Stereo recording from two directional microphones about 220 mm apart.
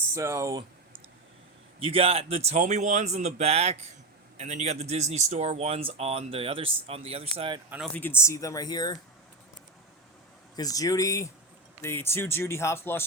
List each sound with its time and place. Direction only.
0.1 s speech: 15° right (ahead or behind)
1.8 s speech: 25° right (ahead or behind)
7.9 s speech: 10° left (ahead or behind)
10.5 s speech: 15° left (ahead or behind)